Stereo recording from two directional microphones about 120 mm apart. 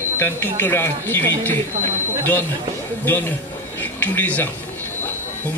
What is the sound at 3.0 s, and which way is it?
A man's voice, 15° left (ahead or behind).